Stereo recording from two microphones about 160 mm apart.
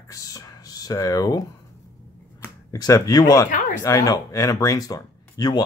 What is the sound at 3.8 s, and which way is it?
Speech, 20° left (ahead or behind).